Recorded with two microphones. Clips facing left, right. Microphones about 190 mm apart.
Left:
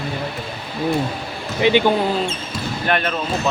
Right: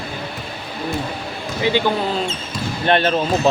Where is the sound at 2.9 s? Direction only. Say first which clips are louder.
Right 5 dB; 30° right (ahead or behind).